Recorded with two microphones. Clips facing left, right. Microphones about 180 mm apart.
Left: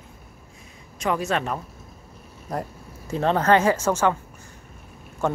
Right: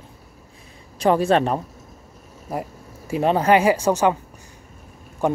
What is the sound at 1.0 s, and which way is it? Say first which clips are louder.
Speech: right 7 dB; 30° right (ahead or behind).